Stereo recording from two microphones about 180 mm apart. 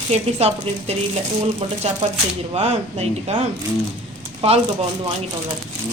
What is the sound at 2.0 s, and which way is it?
Speech, 35° right (ahead or behind).